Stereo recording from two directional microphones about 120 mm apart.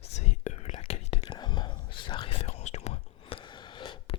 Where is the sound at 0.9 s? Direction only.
60° left (ahead or behind).